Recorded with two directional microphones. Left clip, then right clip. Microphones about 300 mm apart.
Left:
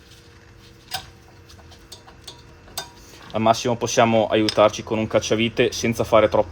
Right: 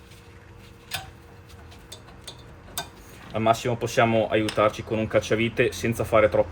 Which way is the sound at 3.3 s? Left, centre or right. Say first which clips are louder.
Left 4 dB; left.